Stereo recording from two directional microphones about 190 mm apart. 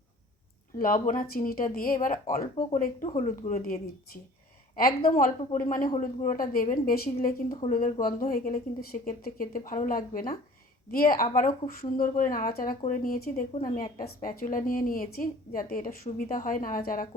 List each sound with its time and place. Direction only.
0.8 s a woman's voice: 45° left (ahead or behind)
5.4 s a woman's voice: 35° left (ahead or behind)